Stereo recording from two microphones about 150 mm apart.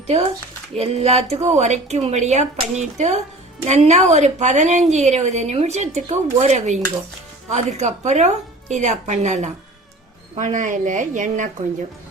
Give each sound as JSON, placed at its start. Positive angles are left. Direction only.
{"t": 0.8, "sound": "a woman's voice", "side_deg": -45}